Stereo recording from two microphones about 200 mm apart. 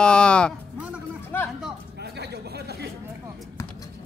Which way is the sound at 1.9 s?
55° right (ahead or behind).